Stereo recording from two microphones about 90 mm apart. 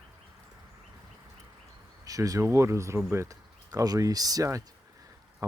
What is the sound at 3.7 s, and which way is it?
Speech, 45° right (ahead or behind).